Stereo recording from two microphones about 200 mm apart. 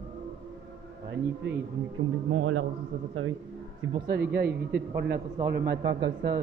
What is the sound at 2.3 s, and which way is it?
A man's voice, 90° right.